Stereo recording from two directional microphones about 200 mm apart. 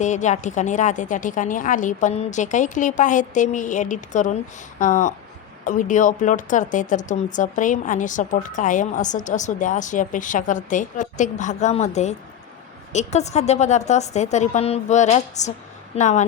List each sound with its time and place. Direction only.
0.0 s speech: 35° left (ahead or behind)